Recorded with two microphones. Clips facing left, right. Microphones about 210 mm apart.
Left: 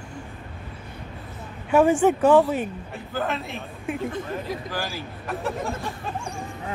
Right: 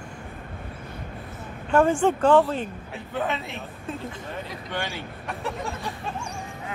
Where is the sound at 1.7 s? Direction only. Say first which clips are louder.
Left 2 dB; 10° left (ahead or behind).